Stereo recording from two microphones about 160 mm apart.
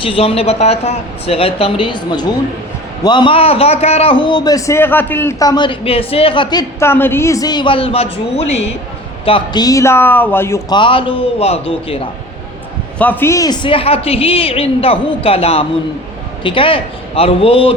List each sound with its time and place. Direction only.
0.0 s a woman's voice: 35° left (ahead or behind)
9.2 s a man's voice: 30° left (ahead or behind); by 10.6 s 15° left (ahead or behind)
10.7 s a woman's voice: 30° left (ahead or behind)
13.0 s a woman's voice: 10° left (ahead or behind); by 17.7 s 35° left (ahead or behind)